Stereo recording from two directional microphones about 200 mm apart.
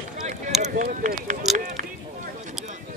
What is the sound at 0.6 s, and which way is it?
Run, 35° right (ahead or behind).